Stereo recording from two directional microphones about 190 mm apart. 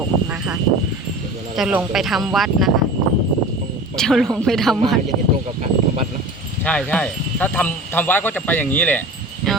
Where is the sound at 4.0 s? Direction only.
Centre (ahead or behind).